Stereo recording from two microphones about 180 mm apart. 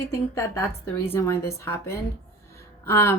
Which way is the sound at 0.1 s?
15° left (ahead or behind).